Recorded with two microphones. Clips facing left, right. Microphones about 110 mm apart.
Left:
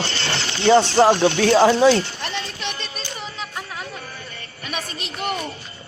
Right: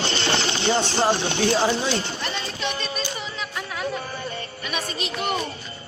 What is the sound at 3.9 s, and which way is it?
Music, 25° right (ahead or behind).